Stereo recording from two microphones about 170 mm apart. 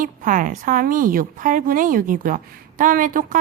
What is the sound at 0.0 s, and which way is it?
A woman's voice, 50° right (ahead or behind).